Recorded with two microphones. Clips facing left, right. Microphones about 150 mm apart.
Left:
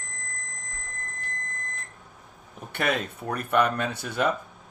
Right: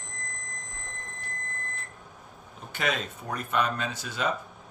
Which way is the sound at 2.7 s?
55° left (ahead or behind).